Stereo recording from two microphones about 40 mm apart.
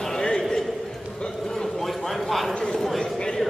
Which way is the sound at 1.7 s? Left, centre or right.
Centre.